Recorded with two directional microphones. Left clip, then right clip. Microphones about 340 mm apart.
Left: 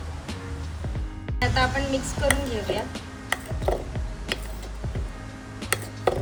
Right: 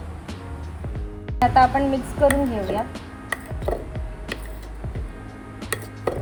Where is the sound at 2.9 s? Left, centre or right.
Centre.